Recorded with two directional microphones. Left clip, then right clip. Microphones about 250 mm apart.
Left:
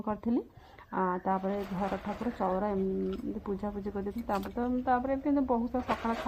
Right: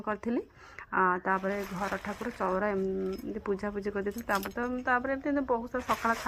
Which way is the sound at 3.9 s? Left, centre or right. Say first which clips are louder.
Right 2 dB; right.